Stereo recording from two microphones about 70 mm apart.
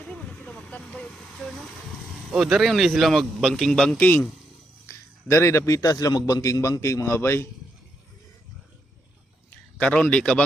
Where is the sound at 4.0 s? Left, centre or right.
Left.